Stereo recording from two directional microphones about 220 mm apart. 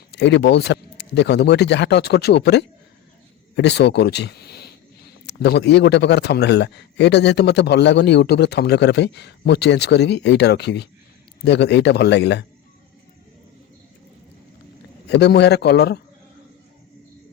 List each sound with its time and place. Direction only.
0.1 s speech: 50° left (ahead or behind)
15.0 s speech: 50° left (ahead or behind)